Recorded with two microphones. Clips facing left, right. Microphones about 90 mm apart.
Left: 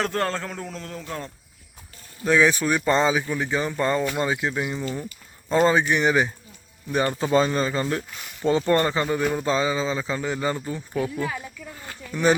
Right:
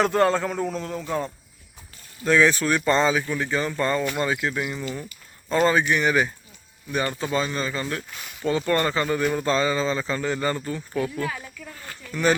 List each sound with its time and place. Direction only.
0.0 s a man's voice: 5° right (ahead or behind)
2.2 s speech: 15° left (ahead or behind); by 8.0 s 30° left (ahead or behind)
8.1 s speech: centre (ahead or behind)
8.4 s speech: 30° left (ahead or behind)